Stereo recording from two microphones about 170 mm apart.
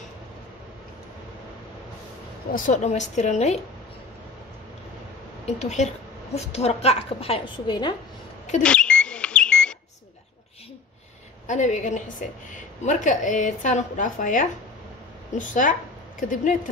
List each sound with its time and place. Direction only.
2.5 s a woman's voice: 50° left (ahead or behind)
5.6 s a woman's voice: 40° left (ahead or behind); by 7.9 s 25° left (ahead or behind)
8.6 s bird: 5° left (ahead or behind)
11.4 s a woman's voice: 45° left (ahead or behind)